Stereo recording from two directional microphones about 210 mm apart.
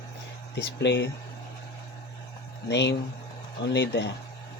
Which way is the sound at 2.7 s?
55° left (ahead or behind).